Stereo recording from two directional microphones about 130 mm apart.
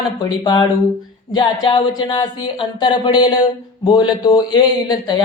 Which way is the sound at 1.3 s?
35° left (ahead or behind).